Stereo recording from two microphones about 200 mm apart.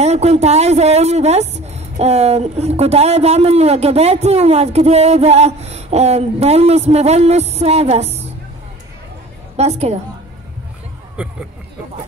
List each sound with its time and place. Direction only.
0.0 s speech: 35° right (ahead or behind)
9.6 s speech: 30° right (ahead or behind)
11.2 s speech: 5° right (ahead or behind)